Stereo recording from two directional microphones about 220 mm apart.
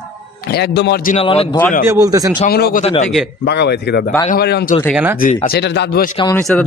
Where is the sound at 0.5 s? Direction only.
50° left (ahead or behind).